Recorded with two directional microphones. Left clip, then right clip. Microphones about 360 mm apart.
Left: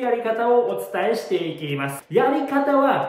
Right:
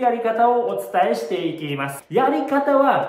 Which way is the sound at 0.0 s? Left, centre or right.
Centre.